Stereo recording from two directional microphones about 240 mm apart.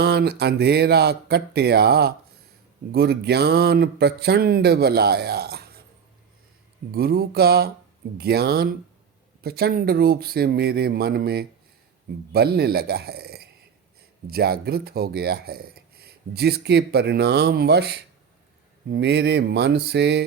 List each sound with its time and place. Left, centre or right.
0.0 s speech: right
6.9 s speech: right
18.9 s mantra: right